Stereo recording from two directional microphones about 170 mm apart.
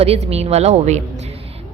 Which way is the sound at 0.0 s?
35° right (ahead or behind).